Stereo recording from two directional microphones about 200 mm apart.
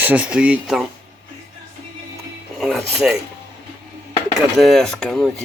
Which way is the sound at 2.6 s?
Centre (ahead or behind).